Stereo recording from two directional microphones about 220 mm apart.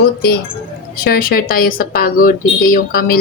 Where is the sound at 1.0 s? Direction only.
45° left (ahead or behind).